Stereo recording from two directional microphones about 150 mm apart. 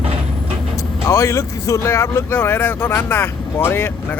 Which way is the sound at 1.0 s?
20° left (ahead or behind).